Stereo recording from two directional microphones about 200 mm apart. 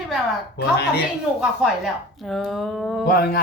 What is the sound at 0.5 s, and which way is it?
Speech, 55° left (ahead or behind).